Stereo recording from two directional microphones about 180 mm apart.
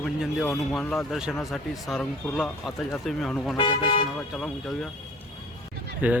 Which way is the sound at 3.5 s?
25° left (ahead or behind).